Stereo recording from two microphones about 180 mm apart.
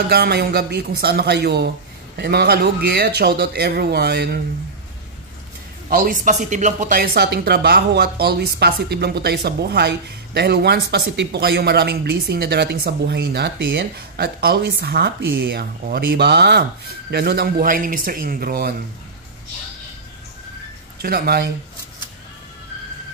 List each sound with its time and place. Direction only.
0.1 s speech: 65° right (ahead or behind)
5.9 s speech: 50° right (ahead or behind)
21.0 s speech: 60° right (ahead or behind)